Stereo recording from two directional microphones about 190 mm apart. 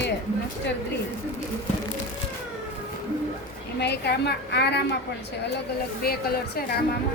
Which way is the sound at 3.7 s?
60° left (ahead or behind).